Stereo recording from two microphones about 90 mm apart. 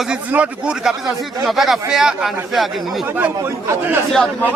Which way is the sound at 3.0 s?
20° right (ahead or behind).